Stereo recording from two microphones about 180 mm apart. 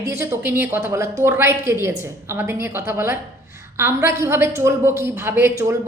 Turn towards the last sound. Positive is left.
turn(degrees=-15)  # may be behind; listen again after turning